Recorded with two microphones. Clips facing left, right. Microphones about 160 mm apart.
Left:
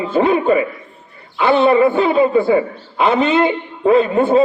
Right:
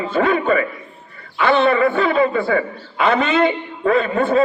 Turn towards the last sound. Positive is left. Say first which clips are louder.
# left 4 dB
turn(degrees=5)  # may be behind; listen again after turning